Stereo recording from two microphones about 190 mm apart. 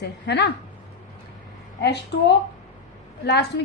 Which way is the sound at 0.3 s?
60° left (ahead or behind).